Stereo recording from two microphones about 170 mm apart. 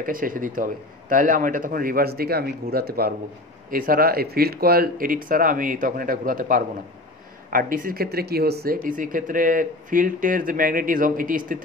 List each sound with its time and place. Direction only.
0.0 s a man's voice: 55° right (ahead or behind)